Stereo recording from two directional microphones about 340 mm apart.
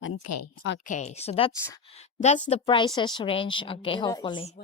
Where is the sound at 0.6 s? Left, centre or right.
Left.